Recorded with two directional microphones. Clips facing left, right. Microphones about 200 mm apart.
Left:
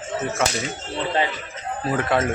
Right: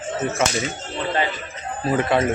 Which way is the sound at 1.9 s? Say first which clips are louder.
Right 2 dB; centre (ahead or behind).